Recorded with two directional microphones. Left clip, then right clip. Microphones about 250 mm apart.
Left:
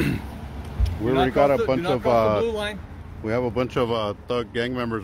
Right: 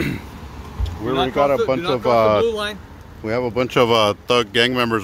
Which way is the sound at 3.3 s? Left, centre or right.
Right.